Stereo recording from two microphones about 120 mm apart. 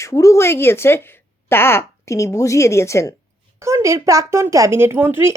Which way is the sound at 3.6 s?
25° right (ahead or behind).